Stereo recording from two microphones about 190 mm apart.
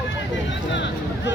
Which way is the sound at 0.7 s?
70° left (ahead or behind).